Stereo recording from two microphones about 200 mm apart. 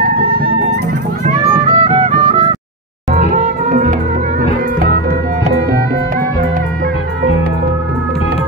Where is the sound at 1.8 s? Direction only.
30° right (ahead or behind); by 5.5 s 45° right (ahead or behind).